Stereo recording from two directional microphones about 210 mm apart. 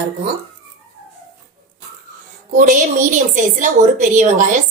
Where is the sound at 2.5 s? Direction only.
40° right (ahead or behind).